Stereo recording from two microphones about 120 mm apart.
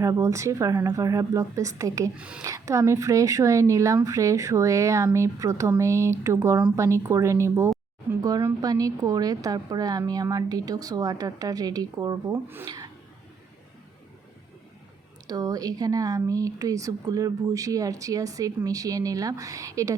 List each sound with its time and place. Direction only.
0.0 s speech: 25° right (ahead or behind)
2.1 s speech: 10° right (ahead or behind)
2.4 s a woman's voice: 25° right (ahead or behind)
15.3 s speech: 30° right (ahead or behind)